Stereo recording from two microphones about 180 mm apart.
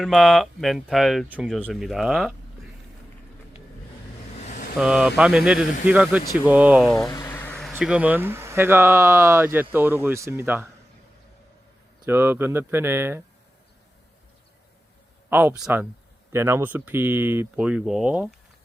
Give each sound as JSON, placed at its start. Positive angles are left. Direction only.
{"t": 0.0, "sound": "speech", "side_deg": 0}
{"t": 4.4, "sound": "vehicle", "side_deg": 45}
{"t": 4.8, "sound": "speech", "side_deg": -5}
{"t": 7.3, "sound": "a sound", "side_deg": 10}
{"t": 7.7, "sound": "speech", "side_deg": -5}
{"t": 12.0, "sound": "speech", "side_deg": -10}
{"t": 15.3, "sound": "speech", "side_deg": -10}